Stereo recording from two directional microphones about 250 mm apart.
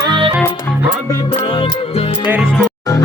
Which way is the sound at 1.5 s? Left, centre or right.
Centre.